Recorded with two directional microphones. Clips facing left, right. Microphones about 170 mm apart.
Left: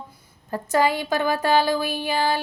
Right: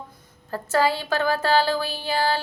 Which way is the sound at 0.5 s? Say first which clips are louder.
Left 1 dB; 15° left (ahead or behind).